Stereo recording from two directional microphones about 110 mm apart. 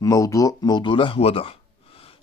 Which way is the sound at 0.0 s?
30° left (ahead or behind).